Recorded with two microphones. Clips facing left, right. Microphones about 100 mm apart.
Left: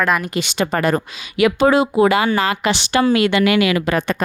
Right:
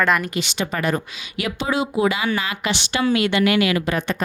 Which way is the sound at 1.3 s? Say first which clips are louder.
Left 12 dB; 90° left.